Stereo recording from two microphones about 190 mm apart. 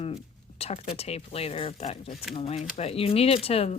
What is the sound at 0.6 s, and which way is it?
Speech, 30° left (ahead or behind).